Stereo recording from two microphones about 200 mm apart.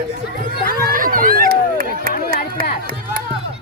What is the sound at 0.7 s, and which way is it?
Chatter, 45° right (ahead or behind).